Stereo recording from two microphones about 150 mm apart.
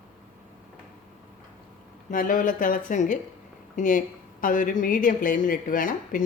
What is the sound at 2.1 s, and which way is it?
Speech, 65° left (ahead or behind).